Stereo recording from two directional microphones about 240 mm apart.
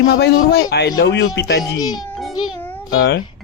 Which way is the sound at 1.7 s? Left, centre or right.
Centre.